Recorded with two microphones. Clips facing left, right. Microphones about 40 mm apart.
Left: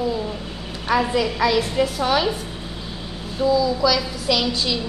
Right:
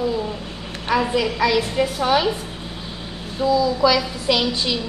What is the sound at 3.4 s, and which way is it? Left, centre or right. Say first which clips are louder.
Speech: even; right.